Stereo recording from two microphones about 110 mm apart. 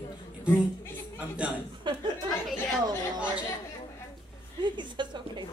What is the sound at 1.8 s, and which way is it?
Speech, 50° right (ahead or behind).